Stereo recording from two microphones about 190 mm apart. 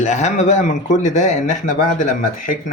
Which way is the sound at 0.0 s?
40° left (ahead or behind).